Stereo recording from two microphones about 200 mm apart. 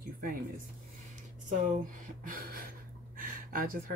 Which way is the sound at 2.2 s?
45° right (ahead or behind).